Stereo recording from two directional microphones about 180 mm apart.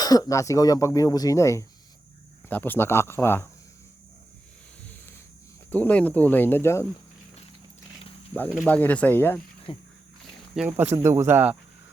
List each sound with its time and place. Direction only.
0.0 s speech: 20° left (ahead or behind)
5.7 s speech: 10° left (ahead or behind)
8.6 s speech: 10° left (ahead or behind)
9.7 s speech: 30° left (ahead or behind)
10.5 s speech: 5° right (ahead or behind)